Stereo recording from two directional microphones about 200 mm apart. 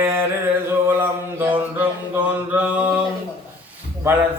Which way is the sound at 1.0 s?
10° right (ahead or behind).